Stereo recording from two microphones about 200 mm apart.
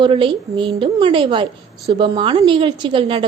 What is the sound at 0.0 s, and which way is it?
A woman's voice, 25° right (ahead or behind).